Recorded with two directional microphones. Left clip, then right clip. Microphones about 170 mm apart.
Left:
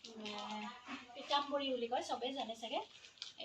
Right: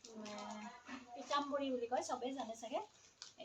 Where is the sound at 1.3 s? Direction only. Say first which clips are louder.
Left 2 dB; centre (ahead or behind).